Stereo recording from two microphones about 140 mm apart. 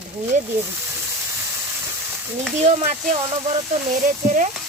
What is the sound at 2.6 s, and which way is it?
Speech, 55° right (ahead or behind).